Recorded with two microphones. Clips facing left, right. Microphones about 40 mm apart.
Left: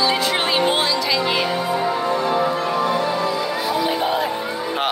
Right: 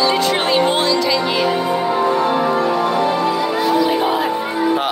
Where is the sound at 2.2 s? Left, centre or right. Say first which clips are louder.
Right 3 dB; right.